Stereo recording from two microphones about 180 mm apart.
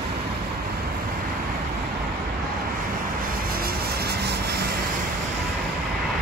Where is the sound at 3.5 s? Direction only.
60° right (ahead or behind).